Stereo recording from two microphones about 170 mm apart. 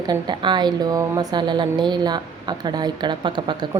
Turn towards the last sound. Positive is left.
turn(degrees=-25)  # may be behind; listen again after turning